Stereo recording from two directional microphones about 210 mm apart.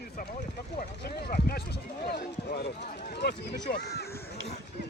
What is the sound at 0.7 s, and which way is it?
Speech, 50° left (ahead or behind).